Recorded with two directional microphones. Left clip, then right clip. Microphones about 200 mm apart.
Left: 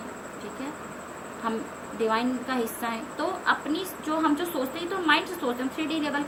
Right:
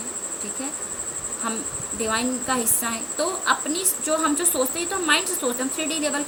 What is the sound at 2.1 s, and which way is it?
A woman's voice, 35° right (ahead or behind).